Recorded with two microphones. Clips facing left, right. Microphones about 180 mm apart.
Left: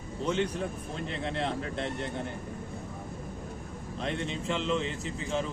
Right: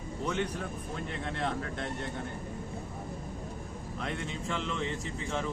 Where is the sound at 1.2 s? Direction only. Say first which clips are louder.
Left 2 dB; 30° left (ahead or behind).